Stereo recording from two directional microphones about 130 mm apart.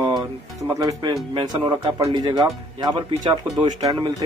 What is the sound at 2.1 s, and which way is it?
Speech, 35° right (ahead or behind).